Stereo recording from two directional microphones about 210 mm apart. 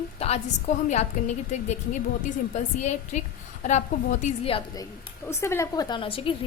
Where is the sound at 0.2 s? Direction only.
30° left (ahead or behind).